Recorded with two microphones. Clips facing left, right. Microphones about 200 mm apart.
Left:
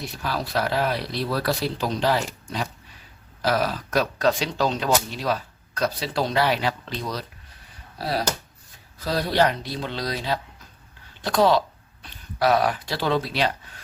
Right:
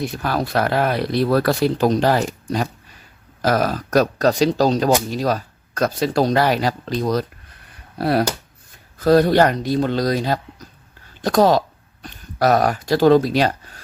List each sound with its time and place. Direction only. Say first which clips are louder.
0.0 s speech: right 7 dB; 55° right (ahead or behind)
7.9 s speech: right 7 dB; 55° right (ahead or behind); by 13.8 s 40° right (ahead or behind)